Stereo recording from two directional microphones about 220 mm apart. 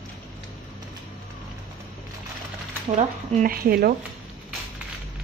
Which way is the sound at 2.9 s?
35° right (ahead or behind).